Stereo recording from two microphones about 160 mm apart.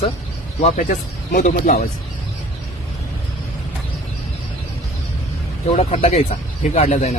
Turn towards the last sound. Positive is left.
turn(degrees=45)  # may be behind; listen again after turning